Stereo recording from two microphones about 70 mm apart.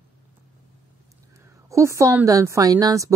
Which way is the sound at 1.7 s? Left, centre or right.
Right.